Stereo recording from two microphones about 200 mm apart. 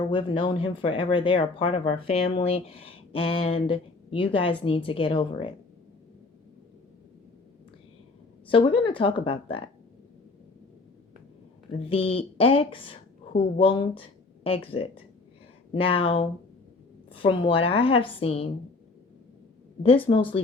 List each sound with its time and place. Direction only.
0.0 s speech: 25° left (ahead or behind)
8.4 s speech: 25° left (ahead or behind)
11.9 s speech: 30° left (ahead or behind)
19.8 s speech: 25° left (ahead or behind)